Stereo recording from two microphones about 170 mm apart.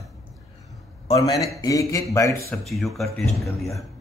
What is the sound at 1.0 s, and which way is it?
Speech, 35° left (ahead or behind).